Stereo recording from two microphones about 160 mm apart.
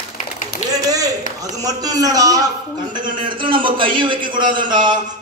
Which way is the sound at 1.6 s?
25° right (ahead or behind).